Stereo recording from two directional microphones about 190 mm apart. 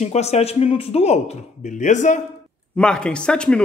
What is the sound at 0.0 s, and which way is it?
A man's voice, 35° left (ahead or behind).